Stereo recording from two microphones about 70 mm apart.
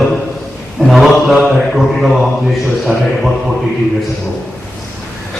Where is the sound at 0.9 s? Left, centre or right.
Centre.